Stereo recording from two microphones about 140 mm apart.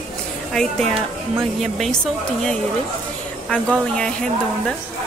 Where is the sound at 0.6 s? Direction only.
5° left (ahead or behind).